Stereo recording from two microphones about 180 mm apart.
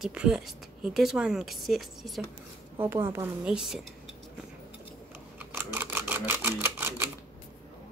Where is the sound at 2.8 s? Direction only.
15° right (ahead or behind).